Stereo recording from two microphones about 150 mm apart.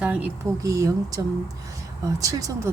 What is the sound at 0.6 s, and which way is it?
Speech, 20° right (ahead or behind).